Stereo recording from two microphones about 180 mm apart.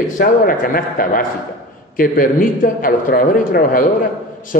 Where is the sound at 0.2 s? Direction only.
50° left (ahead or behind).